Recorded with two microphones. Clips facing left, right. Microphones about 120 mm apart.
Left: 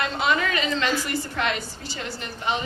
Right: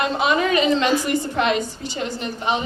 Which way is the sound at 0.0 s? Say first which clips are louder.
Right 4 dB; 20° right (ahead or behind).